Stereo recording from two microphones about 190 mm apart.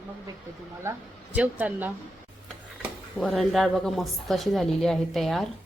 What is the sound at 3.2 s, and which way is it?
A woman's voice, centre (ahead or behind).